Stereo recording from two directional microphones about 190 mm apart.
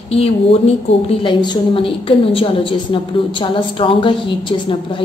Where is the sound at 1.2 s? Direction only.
25° left (ahead or behind).